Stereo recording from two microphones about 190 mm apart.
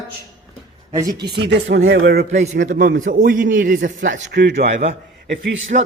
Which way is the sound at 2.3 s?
35° right (ahead or behind).